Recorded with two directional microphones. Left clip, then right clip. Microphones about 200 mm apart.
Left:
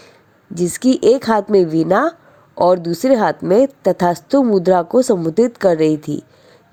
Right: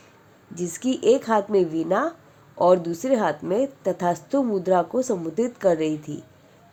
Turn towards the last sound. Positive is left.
turn(degrees=40)  # may be behind; listen again after turning